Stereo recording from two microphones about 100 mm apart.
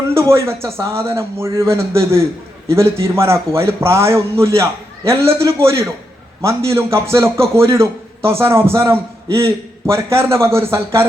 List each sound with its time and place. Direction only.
0.1 s a man's voice: 30° right (ahead or behind)